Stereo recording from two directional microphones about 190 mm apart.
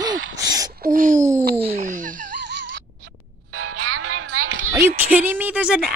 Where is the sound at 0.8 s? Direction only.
45° right (ahead or behind).